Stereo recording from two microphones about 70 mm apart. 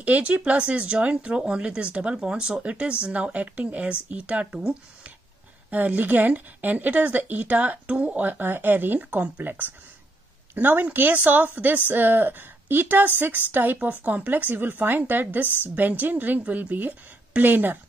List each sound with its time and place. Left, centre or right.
0.0 s speech: centre
15.4 s a woman's voice: left
15.7 s speech: right